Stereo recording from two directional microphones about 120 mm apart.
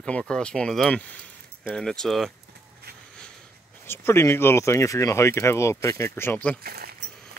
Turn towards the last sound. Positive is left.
turn(degrees=15)  # may be behind; listen again after turning